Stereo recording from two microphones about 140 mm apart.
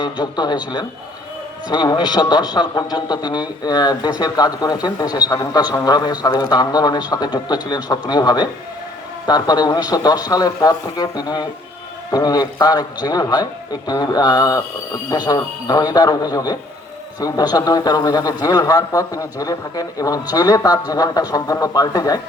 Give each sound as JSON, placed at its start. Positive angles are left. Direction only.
{"t": 0.0, "sound": "a man's voice", "side_deg": 30}